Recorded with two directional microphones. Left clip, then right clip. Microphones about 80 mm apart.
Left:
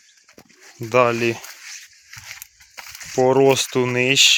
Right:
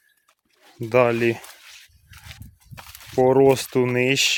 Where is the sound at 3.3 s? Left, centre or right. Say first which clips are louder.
Left 1 dB; right.